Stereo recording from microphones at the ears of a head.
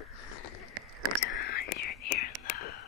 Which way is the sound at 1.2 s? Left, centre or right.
Left.